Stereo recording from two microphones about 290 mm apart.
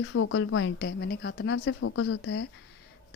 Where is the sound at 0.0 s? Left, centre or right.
Left.